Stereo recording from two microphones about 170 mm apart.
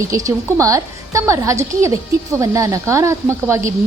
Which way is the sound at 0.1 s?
20° right (ahead or behind).